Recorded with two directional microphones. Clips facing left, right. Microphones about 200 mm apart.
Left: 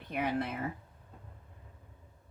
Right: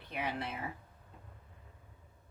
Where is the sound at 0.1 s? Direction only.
50° left (ahead or behind).